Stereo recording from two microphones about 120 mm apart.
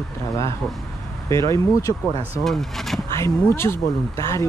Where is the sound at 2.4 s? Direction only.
Centre (ahead or behind).